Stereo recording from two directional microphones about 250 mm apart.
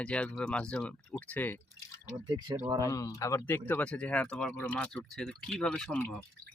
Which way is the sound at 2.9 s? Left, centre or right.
Centre.